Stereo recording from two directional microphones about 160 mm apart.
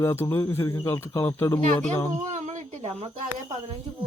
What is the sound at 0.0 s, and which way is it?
Speech, 15° left (ahead or behind).